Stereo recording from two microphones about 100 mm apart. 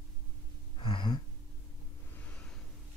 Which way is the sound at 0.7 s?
55° left (ahead or behind).